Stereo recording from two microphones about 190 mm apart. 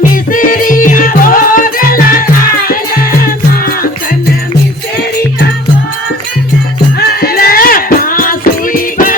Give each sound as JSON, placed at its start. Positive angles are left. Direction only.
{"t": 0.1, "sound": "music", "side_deg": 45}
{"t": 7.0, "sound": "music", "side_deg": 55}